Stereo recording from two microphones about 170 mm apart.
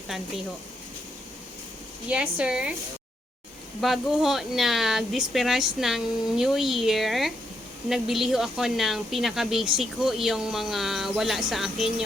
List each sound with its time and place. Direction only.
0.1 s speech: 5° right (ahead or behind)
2.0 s speech: 5° right (ahead or behind)
3.8 s speech: centre (ahead or behind)